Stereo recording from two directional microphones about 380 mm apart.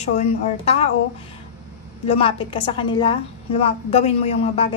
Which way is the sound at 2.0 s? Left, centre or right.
Centre.